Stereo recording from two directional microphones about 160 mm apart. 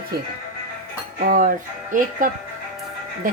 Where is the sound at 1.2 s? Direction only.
65° right (ahead or behind).